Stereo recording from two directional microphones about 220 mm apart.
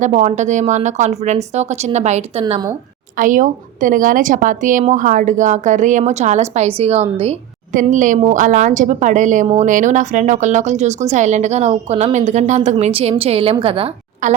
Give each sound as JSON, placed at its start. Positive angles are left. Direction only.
{"t": 0.0, "sound": "a woman's voice", "side_deg": -35}
{"t": 2.4, "sound": "a woman's voice", "side_deg": -20}
{"t": 3.2, "sound": "a woman's voice", "side_deg": -35}